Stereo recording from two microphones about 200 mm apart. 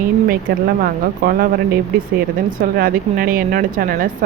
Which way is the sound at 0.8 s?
45° right (ahead or behind).